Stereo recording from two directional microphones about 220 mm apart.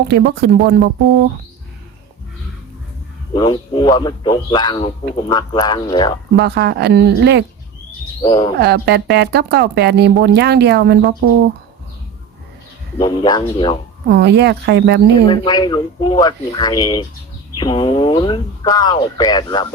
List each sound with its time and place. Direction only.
0.1 s speech: 45° right (ahead or behind)
3.3 s a man's voice: 20° left (ahead or behind)
6.3 s speech: 50° right (ahead or behind)
8.2 s speech: 20° left (ahead or behind)
8.5 s speech: 50° right (ahead or behind)
13.0 s a man's voice: 20° left (ahead or behind)
14.1 s speech: 50° right (ahead or behind)
15.3 s a man's voice: 20° left (ahead or behind)